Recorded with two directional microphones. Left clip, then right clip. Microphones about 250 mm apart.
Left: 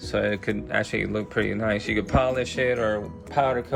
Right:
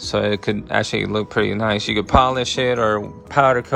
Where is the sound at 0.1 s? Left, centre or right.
Centre.